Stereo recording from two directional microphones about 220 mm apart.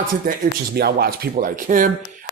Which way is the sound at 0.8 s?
45° right (ahead or behind).